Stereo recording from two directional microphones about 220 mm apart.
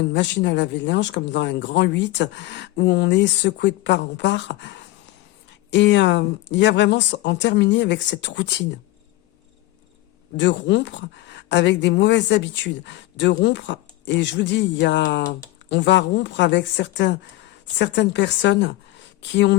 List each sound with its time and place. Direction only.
0.1 s speech: 55° left (ahead or behind)
10.3 s speech: 55° left (ahead or behind)